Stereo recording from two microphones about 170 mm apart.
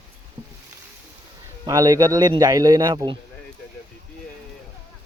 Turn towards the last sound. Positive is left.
turn(degrees=-25)  # may be behind; listen again after turning